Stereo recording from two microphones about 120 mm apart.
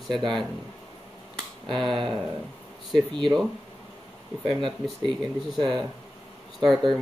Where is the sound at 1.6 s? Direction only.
Centre (ahead or behind).